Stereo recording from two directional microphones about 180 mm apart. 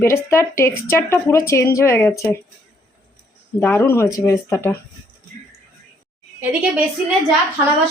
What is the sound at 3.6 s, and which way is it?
Speech, 15° left (ahead or behind).